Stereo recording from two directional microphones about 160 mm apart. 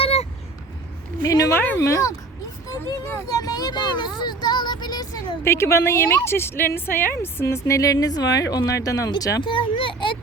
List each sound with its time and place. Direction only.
0.0 s vehicle: 40° left (ahead or behind)
1.2 s a woman's voice: 20° left (ahead or behind)
4.2 s a sound: 25° left (ahead or behind)
5.4 s a woman's voice: 15° left (ahead or behind); by 10.2 s 30° left (ahead or behind)